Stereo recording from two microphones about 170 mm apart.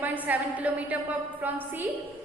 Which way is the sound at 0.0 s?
10° right (ahead or behind).